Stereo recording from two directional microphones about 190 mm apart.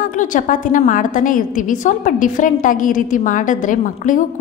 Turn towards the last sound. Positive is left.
turn(degrees=40)  # may be behind; listen again after turning